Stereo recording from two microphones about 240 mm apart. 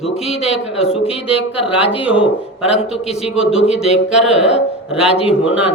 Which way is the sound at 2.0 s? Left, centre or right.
Centre.